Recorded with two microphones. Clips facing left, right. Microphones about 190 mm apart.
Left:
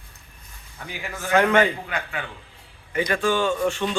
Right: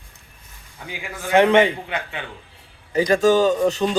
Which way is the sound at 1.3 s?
25° right (ahead or behind).